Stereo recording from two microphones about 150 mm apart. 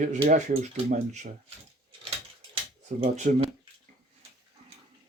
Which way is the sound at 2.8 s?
50° right (ahead or behind).